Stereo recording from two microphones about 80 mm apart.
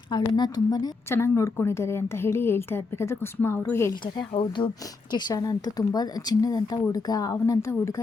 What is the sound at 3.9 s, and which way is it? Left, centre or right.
Speech, left.